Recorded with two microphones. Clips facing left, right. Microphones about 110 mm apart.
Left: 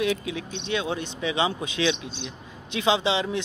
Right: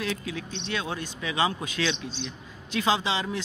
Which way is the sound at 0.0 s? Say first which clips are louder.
Left 5 dB; 20° left (ahead or behind).